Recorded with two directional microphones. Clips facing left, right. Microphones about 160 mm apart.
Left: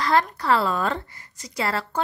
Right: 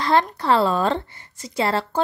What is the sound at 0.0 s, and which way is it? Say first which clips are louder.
Speech: right 2 dB; 25° right (ahead or behind).